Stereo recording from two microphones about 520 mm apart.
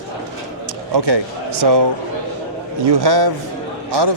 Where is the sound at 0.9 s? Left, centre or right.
Right.